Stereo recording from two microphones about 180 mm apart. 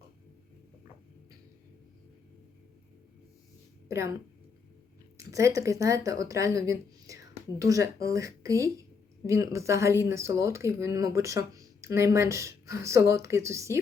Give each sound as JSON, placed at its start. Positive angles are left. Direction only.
{"t": 3.8, "sound": "a woman's voice", "side_deg": -15}